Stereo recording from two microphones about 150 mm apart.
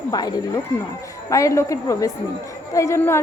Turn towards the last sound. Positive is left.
turn(degrees=20)  # may be behind; listen again after turning